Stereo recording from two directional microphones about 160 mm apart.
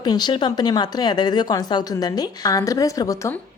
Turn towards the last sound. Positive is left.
turn(degrees=20)  # may be behind; listen again after turning